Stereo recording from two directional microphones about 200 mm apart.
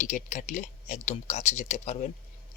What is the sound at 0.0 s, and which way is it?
Speech, 40° left (ahead or behind).